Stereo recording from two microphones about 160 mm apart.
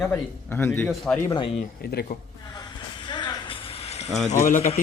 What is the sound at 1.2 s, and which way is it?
Speech, 30° left (ahead or behind).